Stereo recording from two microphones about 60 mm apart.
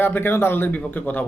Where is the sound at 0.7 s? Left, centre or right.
Left.